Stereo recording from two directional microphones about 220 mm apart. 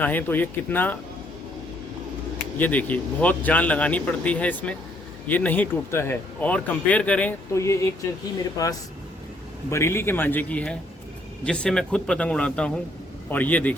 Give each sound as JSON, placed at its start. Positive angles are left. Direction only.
{"t": 0.0, "sound": "speech", "side_deg": 10}
{"t": 2.6, "sound": "speech", "side_deg": 5}